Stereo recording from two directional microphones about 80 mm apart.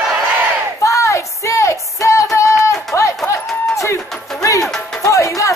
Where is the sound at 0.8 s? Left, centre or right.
Left.